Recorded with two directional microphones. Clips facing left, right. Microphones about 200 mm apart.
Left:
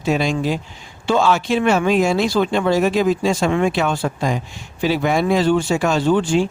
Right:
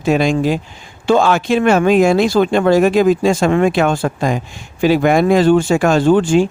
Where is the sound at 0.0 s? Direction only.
50° right (ahead or behind).